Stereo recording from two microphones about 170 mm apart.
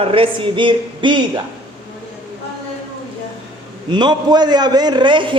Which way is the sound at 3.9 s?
25° right (ahead or behind).